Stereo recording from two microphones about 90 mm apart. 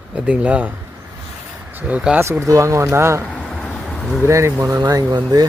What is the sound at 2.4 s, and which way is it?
Speech, 35° right (ahead or behind).